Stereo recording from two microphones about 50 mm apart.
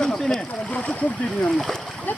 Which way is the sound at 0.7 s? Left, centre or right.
Left.